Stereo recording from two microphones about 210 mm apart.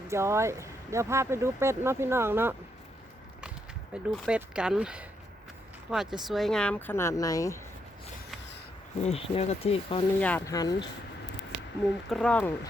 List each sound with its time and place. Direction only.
0.1 s speech: 15° right (ahead or behind)
3.9 s speech: 5° right (ahead or behind); by 7.6 s 15° left (ahead or behind)
9.0 s speech: 30° left (ahead or behind)
10.2 s speech: 5° left (ahead or behind)
12.1 s speech: 5° left (ahead or behind)